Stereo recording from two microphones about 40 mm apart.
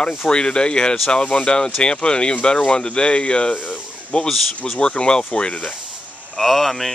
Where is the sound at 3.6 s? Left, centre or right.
Left.